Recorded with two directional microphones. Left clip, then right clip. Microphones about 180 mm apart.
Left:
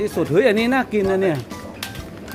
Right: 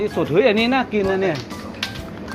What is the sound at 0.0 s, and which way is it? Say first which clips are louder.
Speech: even; 50° left (ahead or behind).